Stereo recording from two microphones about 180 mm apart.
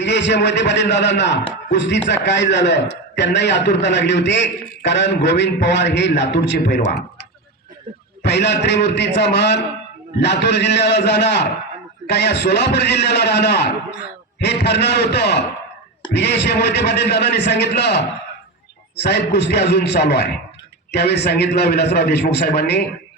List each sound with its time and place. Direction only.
0.0 s a man's voice: 75° left (ahead or behind)
8.2 s a man's voice: 70° left (ahead or behind)